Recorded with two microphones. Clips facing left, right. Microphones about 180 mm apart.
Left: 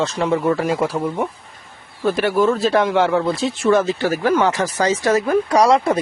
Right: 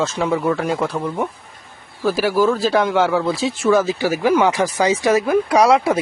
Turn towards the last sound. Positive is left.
turn(degrees=-5)  # may be behind; listen again after turning